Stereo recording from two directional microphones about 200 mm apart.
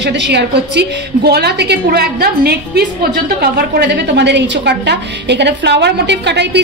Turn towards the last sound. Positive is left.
turn(degrees=-60)  # may be behind; listen again after turning